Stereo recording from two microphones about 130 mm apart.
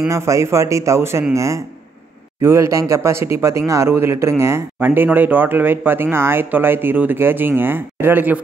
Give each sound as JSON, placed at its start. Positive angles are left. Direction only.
{"t": 0.1, "sound": "speech", "side_deg": -20}